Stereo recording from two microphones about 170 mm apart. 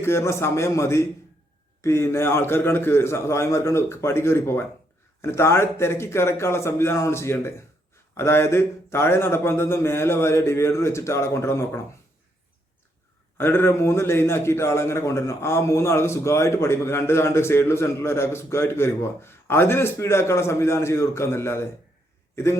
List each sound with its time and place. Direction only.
0.0 s a man's voice: 15° left (ahead or behind)
13.3 s a man's voice: 15° left (ahead or behind)